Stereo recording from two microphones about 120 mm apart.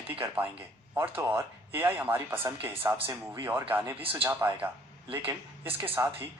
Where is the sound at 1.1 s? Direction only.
15° right (ahead or behind).